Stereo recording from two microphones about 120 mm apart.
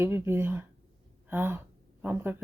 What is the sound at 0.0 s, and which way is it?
Speech, 20° right (ahead or behind).